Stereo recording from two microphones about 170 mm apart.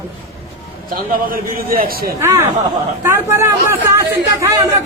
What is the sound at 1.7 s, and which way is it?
Speech, 60° right (ahead or behind).